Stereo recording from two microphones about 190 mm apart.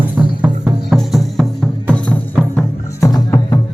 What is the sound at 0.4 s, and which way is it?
Music, 5° right (ahead or behind).